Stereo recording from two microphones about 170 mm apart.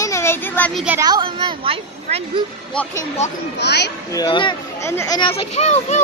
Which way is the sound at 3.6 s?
85° left.